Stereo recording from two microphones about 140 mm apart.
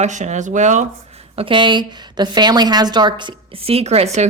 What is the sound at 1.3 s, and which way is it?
A woman's voice, 40° right (ahead or behind).